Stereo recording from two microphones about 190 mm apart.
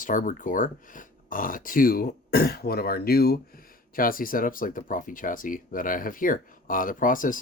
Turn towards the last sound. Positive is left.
turn(degrees=45)  # may be behind; listen again after turning